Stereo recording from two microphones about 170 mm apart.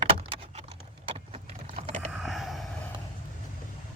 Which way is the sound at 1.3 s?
35° right (ahead or behind).